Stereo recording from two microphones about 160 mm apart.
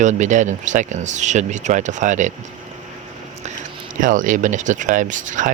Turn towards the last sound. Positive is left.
turn(degrees=-50)  # may be behind; listen again after turning